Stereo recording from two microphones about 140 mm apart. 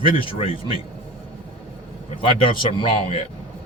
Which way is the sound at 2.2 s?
40° left (ahead or behind).